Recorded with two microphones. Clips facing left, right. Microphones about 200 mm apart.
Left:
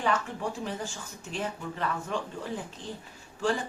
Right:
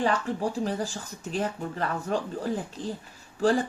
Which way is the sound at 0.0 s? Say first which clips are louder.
Right 3 dB; 35° right (ahead or behind).